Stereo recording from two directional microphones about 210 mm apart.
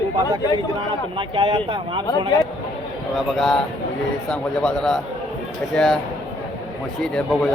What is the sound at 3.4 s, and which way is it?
Speech, centre (ahead or behind).